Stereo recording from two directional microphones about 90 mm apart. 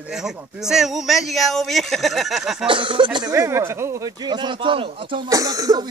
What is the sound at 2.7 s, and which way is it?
Speech, 70° right (ahead or behind).